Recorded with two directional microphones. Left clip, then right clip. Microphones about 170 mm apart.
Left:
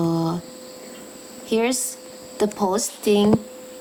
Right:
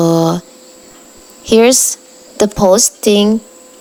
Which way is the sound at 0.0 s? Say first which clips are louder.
Right 12 dB; 50° right (ahead or behind).